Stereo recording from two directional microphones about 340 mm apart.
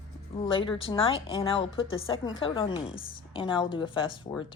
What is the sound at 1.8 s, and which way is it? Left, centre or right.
Speech, left.